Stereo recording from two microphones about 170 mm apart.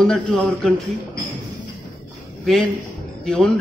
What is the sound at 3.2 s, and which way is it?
Speech, 5° left (ahead or behind).